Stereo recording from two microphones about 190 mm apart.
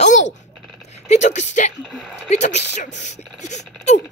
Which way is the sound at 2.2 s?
35° left (ahead or behind).